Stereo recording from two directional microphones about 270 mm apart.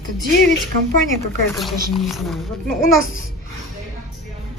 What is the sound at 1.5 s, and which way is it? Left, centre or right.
Speech, centre.